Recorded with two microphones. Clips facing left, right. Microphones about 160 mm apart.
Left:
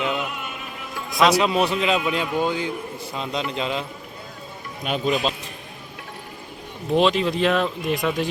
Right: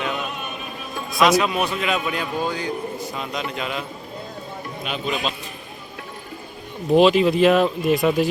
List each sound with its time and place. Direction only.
0.0 s opera: 20° left (ahead or behind)
1.1 s a man's voice: 30° left (ahead or behind)
4.8 s speech: 45° left (ahead or behind)
6.9 s speech: 5° right (ahead or behind)